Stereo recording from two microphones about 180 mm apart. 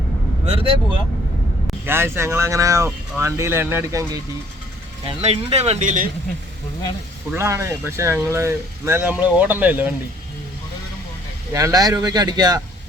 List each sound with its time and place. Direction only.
0.4 s speech: 35° right (ahead or behind)
1.9 s speech: 15° right (ahead or behind)
5.0 s speech: 35° right (ahead or behind)
7.3 s speech: 15° right (ahead or behind)
11.5 s speech: 20° right (ahead or behind)